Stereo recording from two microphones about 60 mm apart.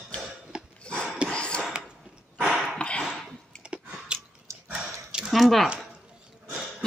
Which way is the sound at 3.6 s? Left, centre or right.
Centre.